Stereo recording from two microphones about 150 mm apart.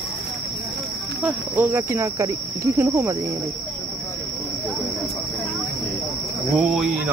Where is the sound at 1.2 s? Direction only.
10° right (ahead or behind).